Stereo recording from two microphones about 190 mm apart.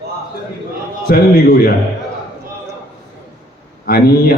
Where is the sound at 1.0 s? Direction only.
55° left (ahead or behind).